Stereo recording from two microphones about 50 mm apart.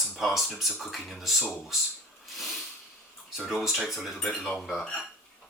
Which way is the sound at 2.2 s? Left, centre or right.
Centre.